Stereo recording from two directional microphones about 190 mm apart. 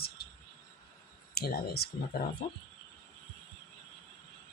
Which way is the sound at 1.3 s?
55° left (ahead or behind).